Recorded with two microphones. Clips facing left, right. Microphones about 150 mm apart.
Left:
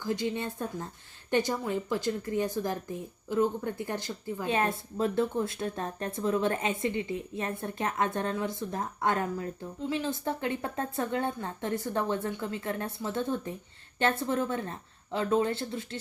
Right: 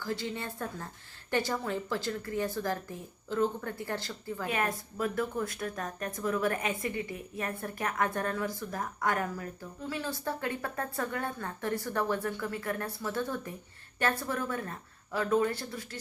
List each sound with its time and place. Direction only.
0.0 s a woman's voice: 20° left (ahead or behind)